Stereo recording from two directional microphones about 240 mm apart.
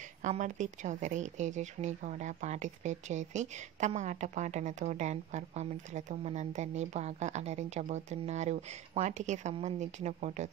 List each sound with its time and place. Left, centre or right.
0.2 s speech: right